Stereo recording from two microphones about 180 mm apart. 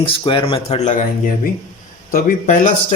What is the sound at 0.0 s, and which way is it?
Speech, 30° left (ahead or behind).